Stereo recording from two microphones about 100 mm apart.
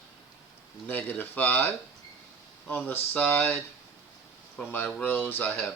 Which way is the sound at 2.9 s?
20° left (ahead or behind).